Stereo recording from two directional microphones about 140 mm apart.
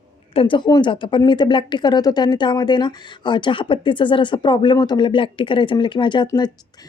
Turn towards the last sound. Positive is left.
turn(degrees=30)  # may be behind; listen again after turning